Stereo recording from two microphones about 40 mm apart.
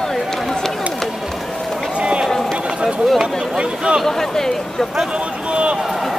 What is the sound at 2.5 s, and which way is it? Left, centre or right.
Run, right.